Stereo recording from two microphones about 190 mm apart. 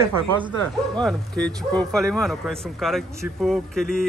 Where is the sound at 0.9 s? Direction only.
5° left (ahead or behind).